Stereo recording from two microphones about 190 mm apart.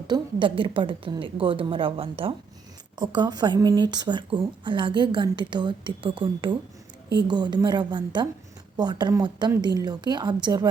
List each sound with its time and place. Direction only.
0.1 s a woman's voice: 25° right (ahead or behind)